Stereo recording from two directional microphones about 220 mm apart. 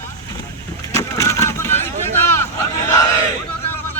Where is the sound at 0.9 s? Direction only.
15° left (ahead or behind).